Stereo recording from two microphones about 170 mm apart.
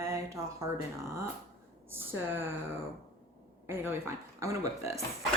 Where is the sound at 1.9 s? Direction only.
10° right (ahead or behind).